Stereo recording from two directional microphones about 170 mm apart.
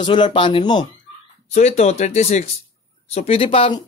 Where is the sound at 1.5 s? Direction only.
40° left (ahead or behind).